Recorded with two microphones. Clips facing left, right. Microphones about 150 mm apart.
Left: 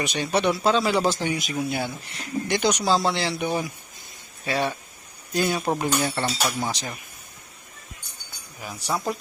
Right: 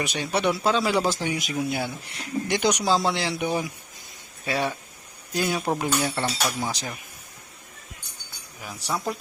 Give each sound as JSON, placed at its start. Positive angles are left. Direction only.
{"t": 0.0, "sound": "speech", "side_deg": -5}
{"t": 8.6, "sound": "speech", "side_deg": 0}